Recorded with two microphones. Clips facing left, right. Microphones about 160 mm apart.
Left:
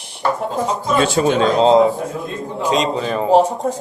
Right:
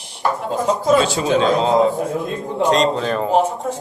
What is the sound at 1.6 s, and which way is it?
Speech, 20° left (ahead or behind).